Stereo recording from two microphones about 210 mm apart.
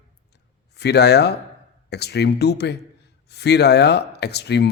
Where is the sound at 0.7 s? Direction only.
50° left (ahead or behind).